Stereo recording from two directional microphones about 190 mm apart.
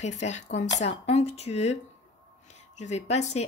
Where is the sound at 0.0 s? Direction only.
40° left (ahead or behind).